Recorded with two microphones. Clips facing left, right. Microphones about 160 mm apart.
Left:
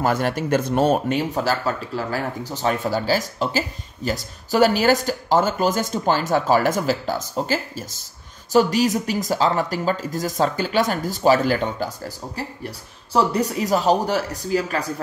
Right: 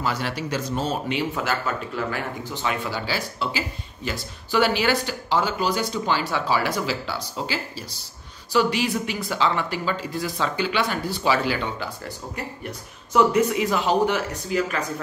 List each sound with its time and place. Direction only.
0.0 s speech: 50° left (ahead or behind)
13.1 s speech: 35° left (ahead or behind)